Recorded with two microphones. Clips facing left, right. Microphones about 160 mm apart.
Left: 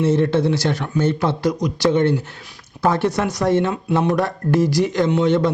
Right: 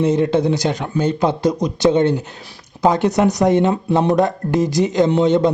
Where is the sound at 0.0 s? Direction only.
15° right (ahead or behind).